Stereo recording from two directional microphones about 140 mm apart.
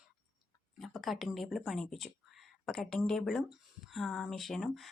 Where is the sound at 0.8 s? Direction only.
Centre (ahead or behind).